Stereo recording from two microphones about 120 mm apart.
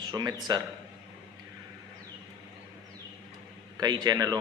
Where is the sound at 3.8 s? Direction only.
35° right (ahead or behind).